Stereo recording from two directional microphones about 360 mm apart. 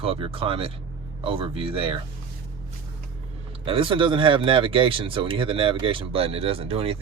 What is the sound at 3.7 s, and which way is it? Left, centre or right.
Speech, centre.